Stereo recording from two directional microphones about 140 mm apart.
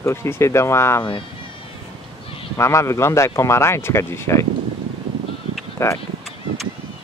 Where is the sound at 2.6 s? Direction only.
20° left (ahead or behind).